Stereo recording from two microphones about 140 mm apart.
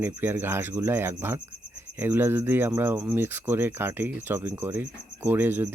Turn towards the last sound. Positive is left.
turn(degrees=-15)  # may be behind; listen again after turning